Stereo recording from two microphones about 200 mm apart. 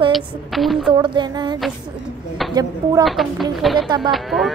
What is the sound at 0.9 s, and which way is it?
A woman's voice, 20° right (ahead or behind).